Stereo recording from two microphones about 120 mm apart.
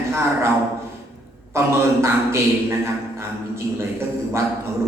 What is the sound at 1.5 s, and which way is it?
A man's voice, 20° right (ahead or behind).